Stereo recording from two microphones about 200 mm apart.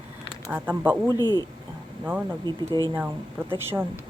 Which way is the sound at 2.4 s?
20° right (ahead or behind).